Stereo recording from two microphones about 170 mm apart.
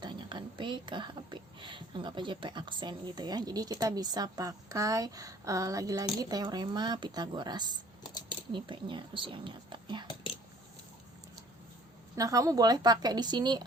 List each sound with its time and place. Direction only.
0.0 s a woman's voice: 25° right (ahead or behind)
12.1 s a woman's voice: 20° right (ahead or behind)